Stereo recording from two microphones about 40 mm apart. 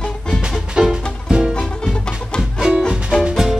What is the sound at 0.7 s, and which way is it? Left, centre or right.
Music, right.